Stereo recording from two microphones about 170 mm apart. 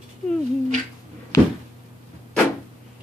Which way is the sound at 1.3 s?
15° left (ahead or behind).